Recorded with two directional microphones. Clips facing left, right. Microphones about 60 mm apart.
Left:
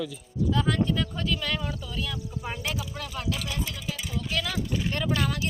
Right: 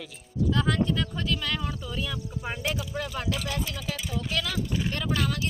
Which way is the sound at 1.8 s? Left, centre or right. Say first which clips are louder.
Right 1 dB; centre.